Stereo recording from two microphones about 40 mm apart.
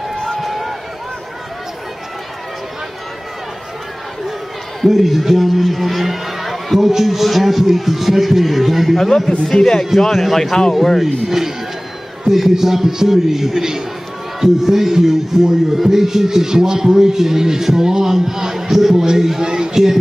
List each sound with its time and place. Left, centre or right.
0.2 s run: centre
0.5 s run: centre
4.8 s a man's voice: centre
9.4 s a man's voice: centre
11.2 s a man's voice: centre